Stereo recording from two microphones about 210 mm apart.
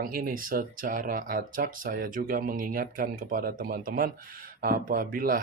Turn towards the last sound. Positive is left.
turn(degrees=-40)  # may be behind; listen again after turning